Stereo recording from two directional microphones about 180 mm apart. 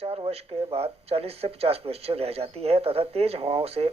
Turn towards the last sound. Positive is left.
turn(degrees=-30)  # may be behind; listen again after turning